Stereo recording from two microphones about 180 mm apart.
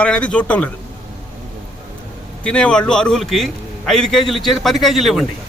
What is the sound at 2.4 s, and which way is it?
A man's voice, 5° left (ahead or behind).